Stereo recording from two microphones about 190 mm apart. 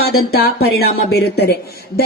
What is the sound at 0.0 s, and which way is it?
A woman's voice, 55° left (ahead or behind).